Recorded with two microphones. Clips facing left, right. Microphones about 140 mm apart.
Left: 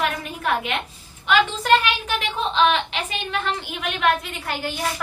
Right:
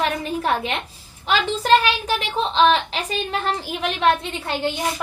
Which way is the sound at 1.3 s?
35° right (ahead or behind).